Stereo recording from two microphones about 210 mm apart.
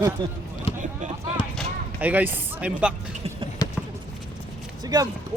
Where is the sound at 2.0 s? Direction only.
10° right (ahead or behind).